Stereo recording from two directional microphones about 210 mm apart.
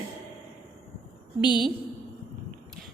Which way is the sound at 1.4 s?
20° left (ahead or behind).